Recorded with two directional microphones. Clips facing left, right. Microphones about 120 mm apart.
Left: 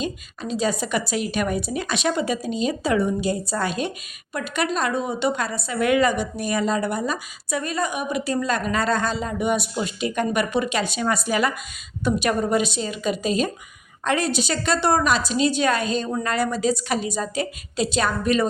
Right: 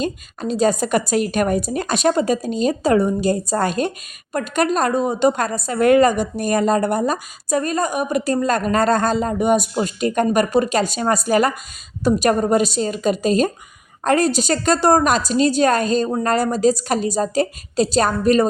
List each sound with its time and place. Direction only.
0.0 s a woman's voice: 45° right (ahead or behind)